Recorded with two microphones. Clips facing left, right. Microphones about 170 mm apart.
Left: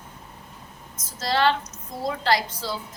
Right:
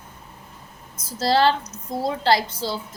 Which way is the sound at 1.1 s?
35° right (ahead or behind).